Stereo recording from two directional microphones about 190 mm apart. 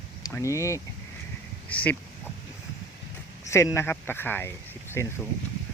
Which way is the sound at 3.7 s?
10° left (ahead or behind).